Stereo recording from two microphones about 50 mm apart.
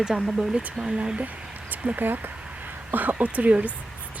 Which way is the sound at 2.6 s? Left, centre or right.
Right.